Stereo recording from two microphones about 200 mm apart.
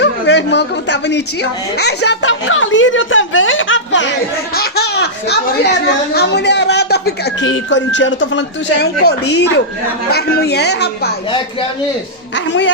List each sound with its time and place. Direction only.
0.0 s a child's voice: 60° left (ahead or behind)
7.5 s speech: 65° left (ahead or behind)